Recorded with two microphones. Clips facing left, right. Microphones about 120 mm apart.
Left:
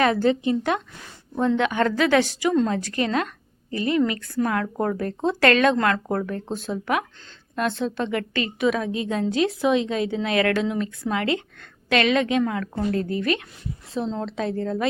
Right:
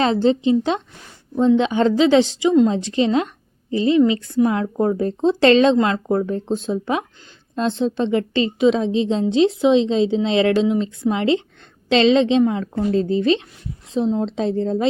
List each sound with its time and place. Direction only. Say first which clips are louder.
0.0 s a woman's voice: right 3 dB; 25° right (ahead or behind)